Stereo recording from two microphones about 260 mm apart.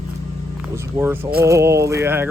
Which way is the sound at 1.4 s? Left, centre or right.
Centre.